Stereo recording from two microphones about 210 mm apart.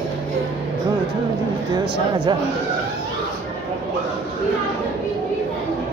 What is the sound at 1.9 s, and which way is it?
Speech, 25° right (ahead or behind).